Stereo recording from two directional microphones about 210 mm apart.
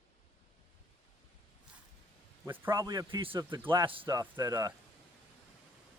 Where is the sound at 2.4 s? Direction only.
10° right (ahead or behind).